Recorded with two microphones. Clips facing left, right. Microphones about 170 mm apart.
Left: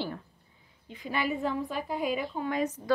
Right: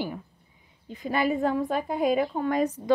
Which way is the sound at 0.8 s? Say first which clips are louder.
Right 6 dB; 40° right (ahead or behind).